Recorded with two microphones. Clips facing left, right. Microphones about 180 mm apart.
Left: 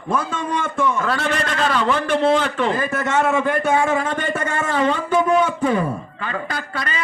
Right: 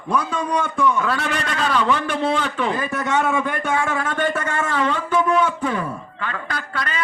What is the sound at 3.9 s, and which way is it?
Speech, 20° left (ahead or behind).